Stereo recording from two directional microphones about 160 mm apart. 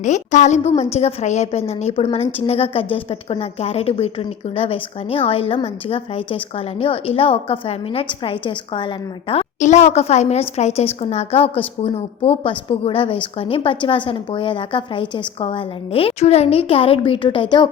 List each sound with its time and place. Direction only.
0.0 s a woman's voice: 50° left (ahead or behind); by 8.9 s 30° left (ahead or behind)
9.3 s a woman's voice: 45° left (ahead or behind)